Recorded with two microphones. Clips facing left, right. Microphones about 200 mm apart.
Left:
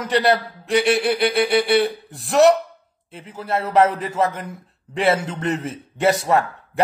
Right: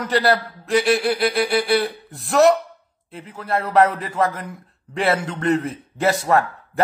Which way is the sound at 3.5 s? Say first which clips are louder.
Even; 30° left (ahead or behind).